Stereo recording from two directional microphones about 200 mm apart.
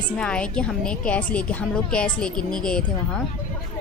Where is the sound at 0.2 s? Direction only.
5° left (ahead or behind).